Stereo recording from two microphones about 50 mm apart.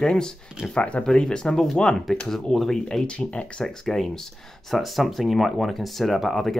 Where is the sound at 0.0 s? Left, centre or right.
Centre.